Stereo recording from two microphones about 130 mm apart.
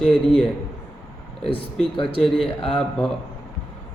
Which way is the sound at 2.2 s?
5° left (ahead or behind).